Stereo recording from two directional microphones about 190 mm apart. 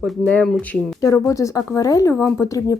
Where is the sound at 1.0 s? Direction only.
15° left (ahead or behind).